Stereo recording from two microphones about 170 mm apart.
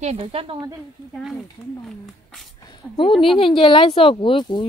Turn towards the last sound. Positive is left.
turn(degrees=25)  # may be behind; listen again after turning